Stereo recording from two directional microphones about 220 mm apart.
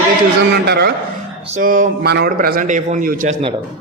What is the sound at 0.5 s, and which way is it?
A man's voice, 45° right (ahead or behind).